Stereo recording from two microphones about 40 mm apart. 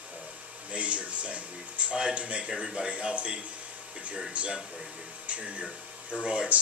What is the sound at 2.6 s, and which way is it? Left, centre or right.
Speech, centre.